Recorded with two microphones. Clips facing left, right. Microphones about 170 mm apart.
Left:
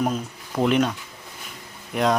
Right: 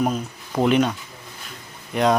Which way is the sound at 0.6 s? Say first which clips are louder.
Right 2 dB; centre (ahead or behind).